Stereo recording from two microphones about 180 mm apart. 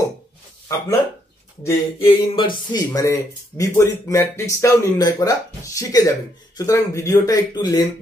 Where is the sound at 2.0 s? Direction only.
25° left (ahead or behind).